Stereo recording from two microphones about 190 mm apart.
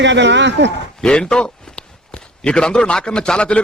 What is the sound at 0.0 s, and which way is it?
Speech, 70° right (ahead or behind).